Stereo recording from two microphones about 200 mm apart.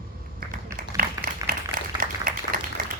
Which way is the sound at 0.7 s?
45° right (ahead or behind).